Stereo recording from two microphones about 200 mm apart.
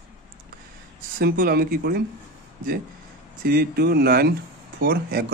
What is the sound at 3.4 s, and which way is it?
Speech, 50° right (ahead or behind).